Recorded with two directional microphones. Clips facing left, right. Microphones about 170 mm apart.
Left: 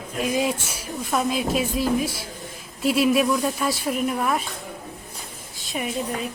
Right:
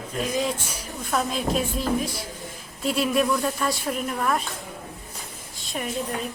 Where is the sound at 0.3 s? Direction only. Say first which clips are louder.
Left 4 dB; 10° left (ahead or behind).